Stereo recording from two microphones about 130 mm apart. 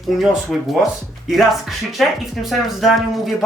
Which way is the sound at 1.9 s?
Centre (ahead or behind).